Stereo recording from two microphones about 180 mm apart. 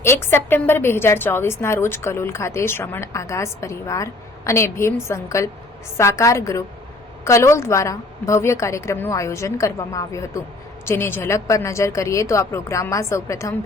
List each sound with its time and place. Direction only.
0.0 s a woman's voice: 15° left (ahead or behind)